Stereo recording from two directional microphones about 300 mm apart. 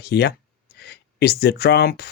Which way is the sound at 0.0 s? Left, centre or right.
Left.